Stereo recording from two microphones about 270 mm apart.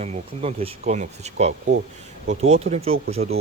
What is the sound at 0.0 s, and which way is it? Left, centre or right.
Speech, right.